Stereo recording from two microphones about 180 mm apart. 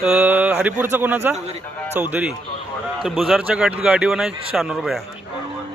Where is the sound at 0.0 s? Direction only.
5° right (ahead or behind).